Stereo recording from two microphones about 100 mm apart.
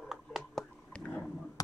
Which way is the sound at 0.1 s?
Centre (ahead or behind).